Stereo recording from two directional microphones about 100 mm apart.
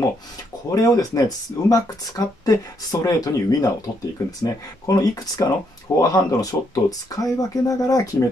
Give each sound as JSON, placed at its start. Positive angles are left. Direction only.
{"t": 0.7, "sound": "speech", "side_deg": 35}